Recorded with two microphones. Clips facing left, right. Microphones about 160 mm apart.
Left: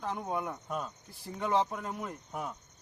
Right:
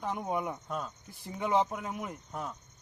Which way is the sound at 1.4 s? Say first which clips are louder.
Right 1 dB; 10° right (ahead or behind).